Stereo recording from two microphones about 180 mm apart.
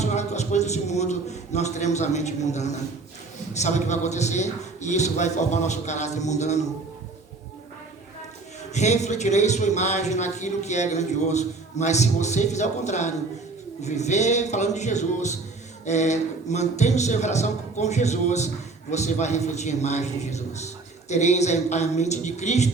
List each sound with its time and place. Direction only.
0.0 s a man's voice: 40° left (ahead or behind)
8.7 s a man's voice: 40° left (ahead or behind)